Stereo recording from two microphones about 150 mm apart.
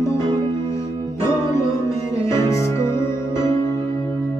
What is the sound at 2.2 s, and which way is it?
Music, 20° left (ahead or behind).